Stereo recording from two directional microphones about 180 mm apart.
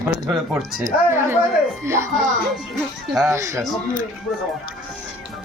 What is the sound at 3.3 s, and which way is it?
Speech, 15° right (ahead or behind).